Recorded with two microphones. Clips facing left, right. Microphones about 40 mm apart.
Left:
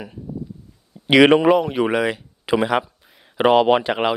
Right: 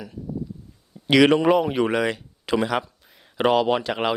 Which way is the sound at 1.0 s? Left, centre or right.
Left.